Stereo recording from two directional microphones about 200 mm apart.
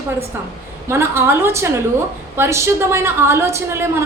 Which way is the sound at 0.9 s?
10° right (ahead or behind).